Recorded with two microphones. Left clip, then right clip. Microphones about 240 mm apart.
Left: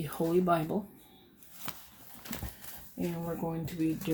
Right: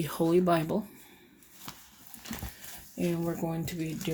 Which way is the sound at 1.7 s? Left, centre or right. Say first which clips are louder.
Left 2 dB; centre.